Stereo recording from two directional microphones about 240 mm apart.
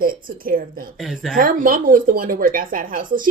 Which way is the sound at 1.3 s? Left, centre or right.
Right.